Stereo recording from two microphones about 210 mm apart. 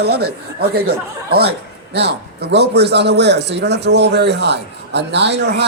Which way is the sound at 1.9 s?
50° right (ahead or behind).